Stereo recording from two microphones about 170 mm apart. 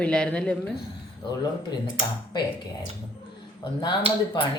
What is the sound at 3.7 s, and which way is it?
Speech, 30° left (ahead or behind).